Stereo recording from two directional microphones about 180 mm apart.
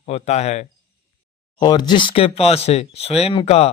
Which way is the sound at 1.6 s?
25° left (ahead or behind).